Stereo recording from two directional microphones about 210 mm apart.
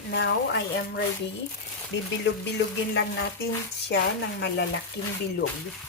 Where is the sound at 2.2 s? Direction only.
60° left (ahead or behind).